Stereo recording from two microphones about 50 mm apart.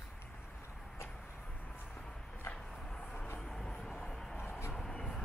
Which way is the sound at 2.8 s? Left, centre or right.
Centre.